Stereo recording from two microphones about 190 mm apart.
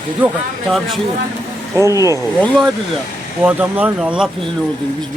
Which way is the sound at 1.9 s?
15° right (ahead or behind).